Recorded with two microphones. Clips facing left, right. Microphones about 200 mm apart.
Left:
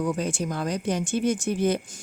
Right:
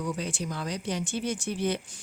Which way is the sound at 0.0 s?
50° left (ahead or behind).